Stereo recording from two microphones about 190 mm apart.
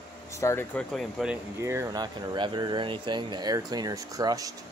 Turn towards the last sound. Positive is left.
turn(degrees=-20)  # may be behind; listen again after turning